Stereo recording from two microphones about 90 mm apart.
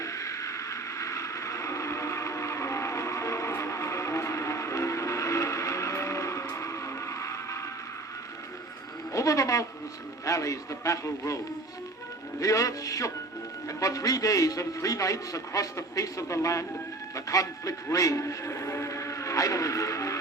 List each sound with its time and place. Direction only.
0.0 s vehicle: 35° left (ahead or behind)
9.1 s a sound: 40° left (ahead or behind)
10.2 s a man's voice: 40° left (ahead or behind)
12.4 s a man's voice: 40° left (ahead or behind)